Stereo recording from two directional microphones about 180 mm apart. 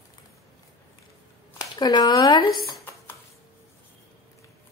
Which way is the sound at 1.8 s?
20° left (ahead or behind).